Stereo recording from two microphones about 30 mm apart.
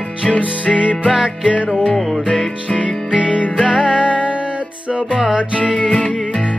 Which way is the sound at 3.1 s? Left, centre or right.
Right.